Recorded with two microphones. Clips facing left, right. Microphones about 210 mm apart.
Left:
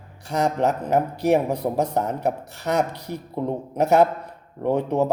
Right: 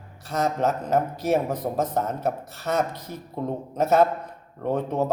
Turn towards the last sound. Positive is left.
turn(degrees=15)  # may be behind; listen again after turning